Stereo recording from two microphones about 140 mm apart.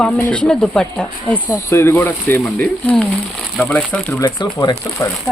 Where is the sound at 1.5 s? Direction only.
20° left (ahead or behind).